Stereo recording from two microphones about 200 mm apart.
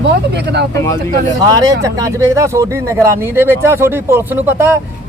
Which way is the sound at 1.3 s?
15° right (ahead or behind).